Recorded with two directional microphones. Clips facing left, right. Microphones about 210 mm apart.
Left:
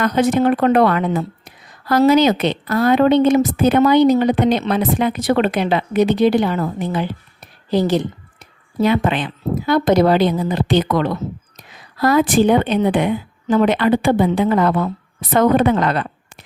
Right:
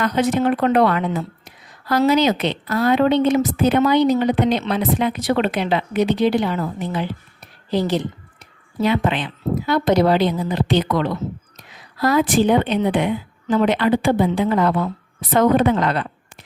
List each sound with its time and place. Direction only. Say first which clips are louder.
0.0 s a woman's voice: left 3 dB; 50° left (ahead or behind)